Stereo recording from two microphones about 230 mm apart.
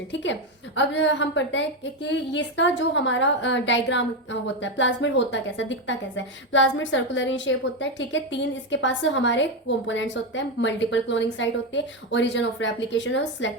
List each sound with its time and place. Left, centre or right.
0.1 s a woman's voice: left